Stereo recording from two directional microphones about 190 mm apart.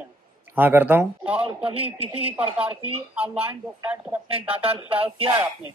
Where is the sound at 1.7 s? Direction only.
30° right (ahead or behind).